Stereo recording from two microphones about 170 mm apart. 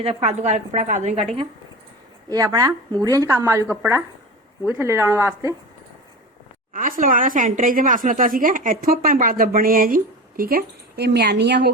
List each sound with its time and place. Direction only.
0.0 s a woman's voice: 35° right (ahead or behind)
2.3 s a woman's voice: 20° right (ahead or behind)
6.7 s a woman's voice: 55° right (ahead or behind); by 11.7 s 80° right